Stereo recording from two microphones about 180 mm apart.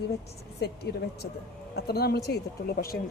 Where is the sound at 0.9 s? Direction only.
65° left (ahead or behind).